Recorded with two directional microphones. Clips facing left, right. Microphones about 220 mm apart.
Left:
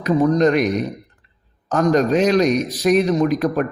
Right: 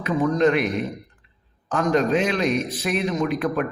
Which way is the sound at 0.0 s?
40° left (ahead or behind).